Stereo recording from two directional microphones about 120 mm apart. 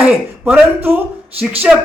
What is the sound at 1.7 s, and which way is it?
Speech, 10° right (ahead or behind).